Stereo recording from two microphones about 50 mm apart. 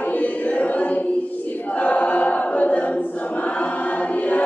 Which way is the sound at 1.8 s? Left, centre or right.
Left.